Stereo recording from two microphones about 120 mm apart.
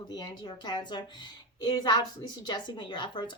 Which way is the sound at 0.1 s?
35° left (ahead or behind).